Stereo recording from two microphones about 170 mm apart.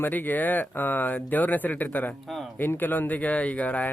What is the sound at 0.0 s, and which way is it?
Speech, 10° left (ahead or behind).